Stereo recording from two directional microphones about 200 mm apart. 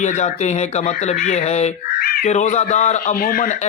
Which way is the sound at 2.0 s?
50° left (ahead or behind).